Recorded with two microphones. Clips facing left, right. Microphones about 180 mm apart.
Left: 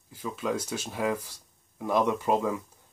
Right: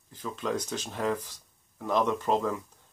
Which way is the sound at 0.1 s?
10° left (ahead or behind).